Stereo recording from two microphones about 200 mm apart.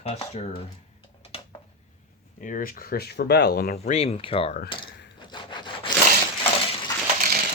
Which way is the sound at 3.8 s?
35° left (ahead or behind).